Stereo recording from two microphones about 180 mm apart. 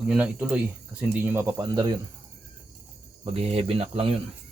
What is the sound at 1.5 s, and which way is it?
Speech, 25° right (ahead or behind).